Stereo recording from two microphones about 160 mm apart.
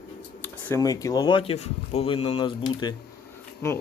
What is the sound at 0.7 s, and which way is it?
Speech, 20° left (ahead or behind).